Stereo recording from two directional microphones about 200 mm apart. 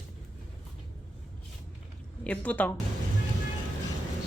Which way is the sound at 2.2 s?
5° left (ahead or behind).